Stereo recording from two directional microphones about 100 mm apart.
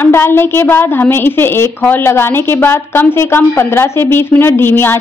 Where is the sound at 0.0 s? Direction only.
25° left (ahead or behind).